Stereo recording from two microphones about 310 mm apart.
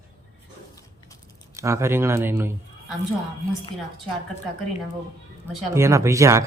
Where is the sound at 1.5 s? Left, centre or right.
Centre.